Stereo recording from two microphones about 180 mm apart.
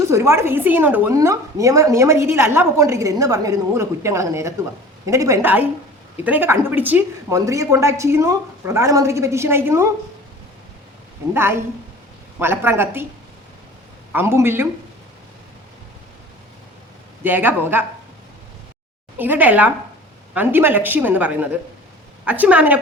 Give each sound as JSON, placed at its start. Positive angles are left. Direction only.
{"t": 0.1, "sound": "a woman's voice", "side_deg": -15}
{"t": 11.3, "sound": "a woman's voice", "side_deg": -15}
{"t": 14.1, "sound": "a woman's voice", "side_deg": -15}
{"t": 17.2, "sound": "a woman's voice", "side_deg": -10}
{"t": 19.1, "sound": "a woman's voice", "side_deg": -10}